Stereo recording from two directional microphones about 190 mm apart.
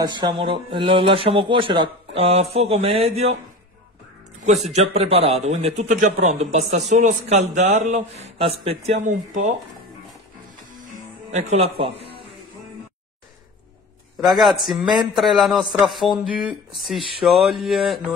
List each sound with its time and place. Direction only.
0.0 s speech: 25° right (ahead or behind)
4.6 s speech: 35° right (ahead or behind)
9.0 s speech: 40° right (ahead or behind)
10.7 s music: 45° right (ahead or behind)
11.3 s speech: 30° right (ahead or behind)
14.2 s speech: centre (ahead or behind)